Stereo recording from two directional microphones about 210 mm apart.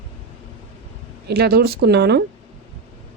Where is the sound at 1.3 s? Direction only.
50° right (ahead or behind).